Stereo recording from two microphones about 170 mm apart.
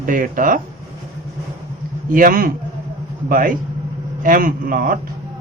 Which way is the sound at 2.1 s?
55° right (ahead or behind).